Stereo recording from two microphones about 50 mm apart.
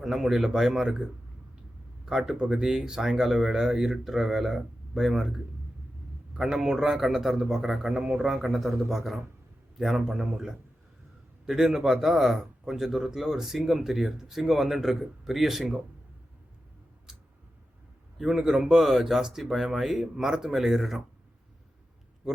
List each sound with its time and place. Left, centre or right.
0.0 s speech: centre
2.0 s speech: centre
2.3 s speech: right
2.6 s a man's voice: centre
17.1 s tick: centre
18.2 s a man's voice: centre